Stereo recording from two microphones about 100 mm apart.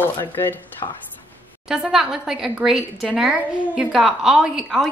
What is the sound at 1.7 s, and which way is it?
A woman's voice, 5° right (ahead or behind).